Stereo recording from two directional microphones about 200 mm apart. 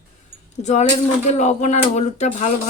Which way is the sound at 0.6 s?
35° left (ahead or behind).